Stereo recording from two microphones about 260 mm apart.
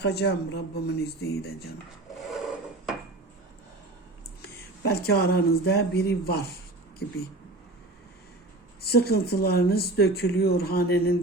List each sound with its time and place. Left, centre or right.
0.0 s speech: left
2.2 s a sound: centre
4.4 s speech: left
8.8 s speech: left